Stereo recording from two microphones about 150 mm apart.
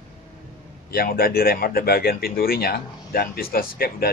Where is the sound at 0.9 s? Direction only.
90° left.